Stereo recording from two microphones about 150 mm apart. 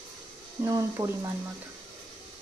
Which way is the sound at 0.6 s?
20° right (ahead or behind).